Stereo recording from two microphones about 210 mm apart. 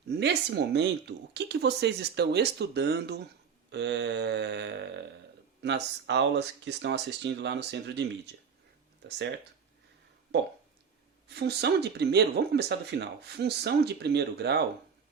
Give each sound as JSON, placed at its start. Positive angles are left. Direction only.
{"t": 0.1, "sound": "speech", "side_deg": -55}
{"t": 11.3, "sound": "speech", "side_deg": -50}